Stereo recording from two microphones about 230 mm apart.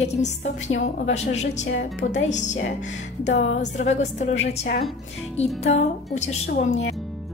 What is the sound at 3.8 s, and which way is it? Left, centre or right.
Speech, left.